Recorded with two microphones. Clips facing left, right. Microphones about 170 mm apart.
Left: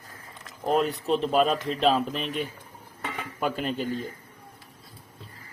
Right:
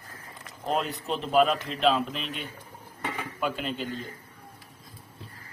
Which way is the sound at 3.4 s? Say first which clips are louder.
Left 3 dB; 45° left (ahead or behind).